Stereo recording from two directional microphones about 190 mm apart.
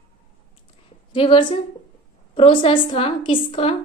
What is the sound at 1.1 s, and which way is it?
A woman's voice, 30° left (ahead or behind).